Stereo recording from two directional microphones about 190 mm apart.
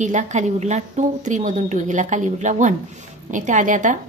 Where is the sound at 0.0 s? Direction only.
40° right (ahead or behind).